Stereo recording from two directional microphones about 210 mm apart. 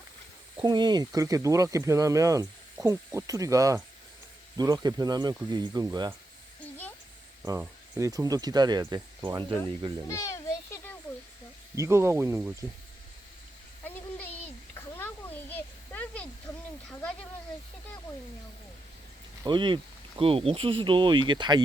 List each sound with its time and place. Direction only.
0.5 s speech: 20° right (ahead or behind)
7.4 s speech: 15° right (ahead or behind)
10.1 s a sound: 15° left (ahead or behind)
11.7 s speech: 15° right (ahead or behind)
13.8 s a sound: 10° left (ahead or behind)
19.5 s speech: 20° right (ahead or behind)